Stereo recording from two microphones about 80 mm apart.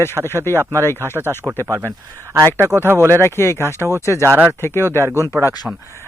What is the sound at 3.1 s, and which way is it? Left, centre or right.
Speech, left.